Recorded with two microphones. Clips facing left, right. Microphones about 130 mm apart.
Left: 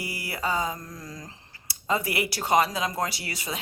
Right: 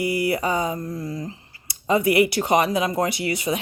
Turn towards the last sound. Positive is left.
turn(degrees=-20)  # may be behind; listen again after turning